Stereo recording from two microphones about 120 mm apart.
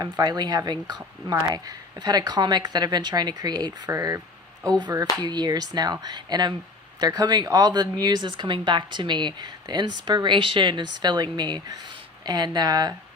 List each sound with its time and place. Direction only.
0.0 s speech: 35° right (ahead or behind)